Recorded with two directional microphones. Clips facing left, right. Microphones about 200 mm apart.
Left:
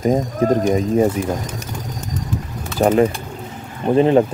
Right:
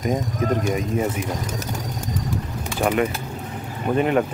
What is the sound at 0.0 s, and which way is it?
Speech, 35° left (ahead or behind).